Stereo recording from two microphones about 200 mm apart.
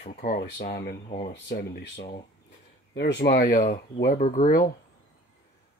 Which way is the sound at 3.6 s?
40° left (ahead or behind).